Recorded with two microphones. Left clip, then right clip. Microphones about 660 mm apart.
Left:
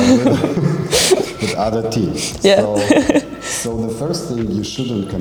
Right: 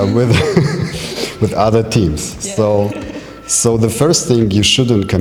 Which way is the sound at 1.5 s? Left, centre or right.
Right.